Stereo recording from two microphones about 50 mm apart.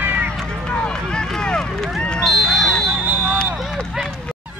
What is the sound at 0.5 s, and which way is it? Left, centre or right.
Run, centre.